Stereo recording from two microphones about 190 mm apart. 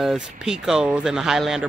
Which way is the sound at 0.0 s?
Centre (ahead or behind).